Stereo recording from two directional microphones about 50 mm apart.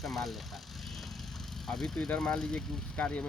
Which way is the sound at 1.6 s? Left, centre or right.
Centre.